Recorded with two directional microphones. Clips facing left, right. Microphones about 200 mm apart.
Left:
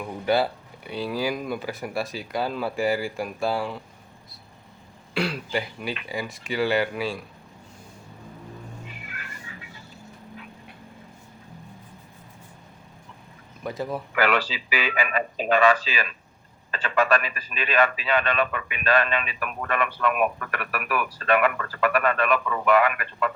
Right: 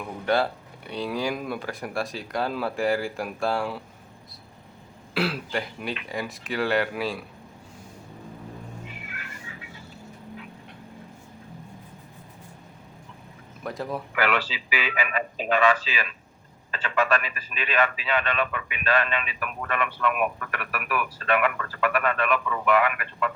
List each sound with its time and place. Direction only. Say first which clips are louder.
0.3 s speech: left 1 dB; 5° left (ahead or behind)
5.1 s speech: even; centre (ahead or behind)
9.5 s vehicle: even; 45° left (ahead or behind)
13.7 s speech: left 1 dB; centre (ahead or behind)
14.2 s a man's voice: left 3 dB; 40° left (ahead or behind)